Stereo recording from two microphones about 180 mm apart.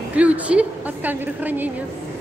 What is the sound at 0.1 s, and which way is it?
A woman's voice, 5° right (ahead or behind).